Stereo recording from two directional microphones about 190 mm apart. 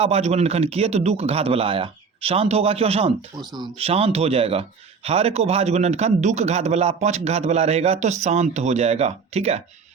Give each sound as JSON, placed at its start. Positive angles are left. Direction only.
{"t": 0.0, "sound": "a man's voice", "side_deg": -35}